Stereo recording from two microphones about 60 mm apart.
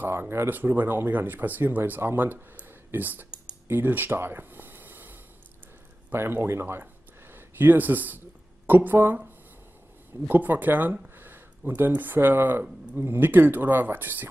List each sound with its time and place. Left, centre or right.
0.3 s speech: right
3.6 s a sound: right
6.1 s speech: right